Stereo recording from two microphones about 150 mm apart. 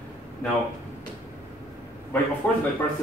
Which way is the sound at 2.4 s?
10° left (ahead or behind).